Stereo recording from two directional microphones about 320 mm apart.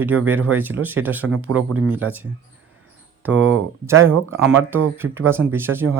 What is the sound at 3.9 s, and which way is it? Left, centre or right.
Speech, right.